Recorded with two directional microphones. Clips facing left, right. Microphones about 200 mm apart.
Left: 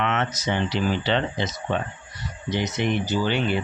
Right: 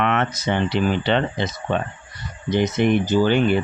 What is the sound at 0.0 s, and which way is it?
Speech, 60° right (ahead or behind).